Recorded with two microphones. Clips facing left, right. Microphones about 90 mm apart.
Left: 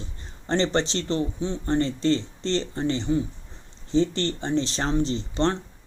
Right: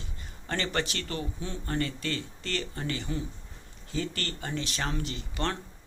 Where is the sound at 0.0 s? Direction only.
30° left (ahead or behind).